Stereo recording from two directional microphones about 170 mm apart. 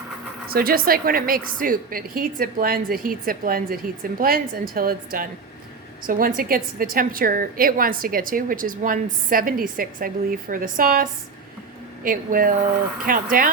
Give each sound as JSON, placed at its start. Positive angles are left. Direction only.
{"t": 0.5, "sound": "a woman's voice", "side_deg": -60}